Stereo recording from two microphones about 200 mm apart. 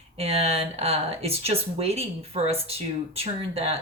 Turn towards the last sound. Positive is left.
turn(degrees=-30)  # may be behind; listen again after turning